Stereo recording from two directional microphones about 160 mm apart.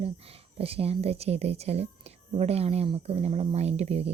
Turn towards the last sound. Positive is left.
turn(degrees=-40)  # may be behind; listen again after turning